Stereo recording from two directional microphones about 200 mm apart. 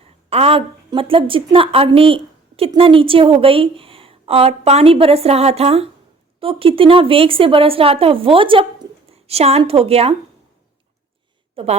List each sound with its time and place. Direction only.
0.3 s a woman's voice: 30° right (ahead or behind)
11.5 s a woman's voice: 30° right (ahead or behind)